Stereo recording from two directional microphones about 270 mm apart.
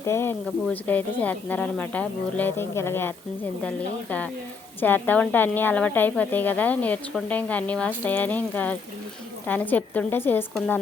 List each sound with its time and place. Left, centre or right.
0.0 s a woman's voice: centre